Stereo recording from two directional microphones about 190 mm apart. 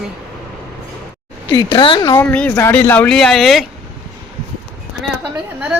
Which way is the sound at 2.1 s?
5° left (ahead or behind).